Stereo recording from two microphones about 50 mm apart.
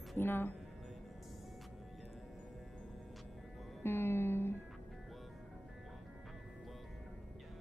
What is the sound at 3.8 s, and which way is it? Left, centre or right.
Speech, left.